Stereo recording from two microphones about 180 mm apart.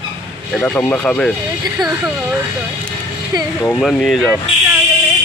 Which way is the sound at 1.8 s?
20° right (ahead or behind).